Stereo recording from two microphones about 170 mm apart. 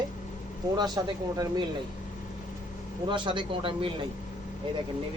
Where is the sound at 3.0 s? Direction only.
25° right (ahead or behind).